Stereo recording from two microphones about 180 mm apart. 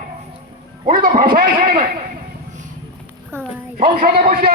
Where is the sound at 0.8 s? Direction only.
50° right (ahead or behind).